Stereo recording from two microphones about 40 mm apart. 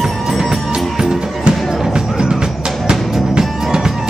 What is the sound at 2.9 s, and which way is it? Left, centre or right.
Music, centre.